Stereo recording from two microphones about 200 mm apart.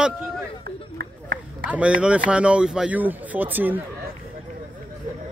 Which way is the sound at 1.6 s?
5° right (ahead or behind).